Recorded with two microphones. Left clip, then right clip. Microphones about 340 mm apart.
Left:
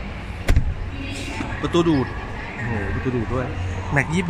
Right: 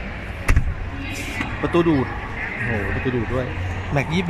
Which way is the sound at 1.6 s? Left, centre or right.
Centre.